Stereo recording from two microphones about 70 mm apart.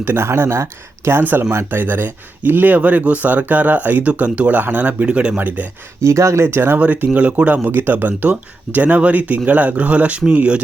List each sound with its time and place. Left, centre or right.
0.0 s speech: right
6.0 s speech: right
6.7 s speech: right
7.6 s speech: right